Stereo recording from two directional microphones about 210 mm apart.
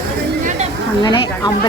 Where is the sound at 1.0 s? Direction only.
20° left (ahead or behind).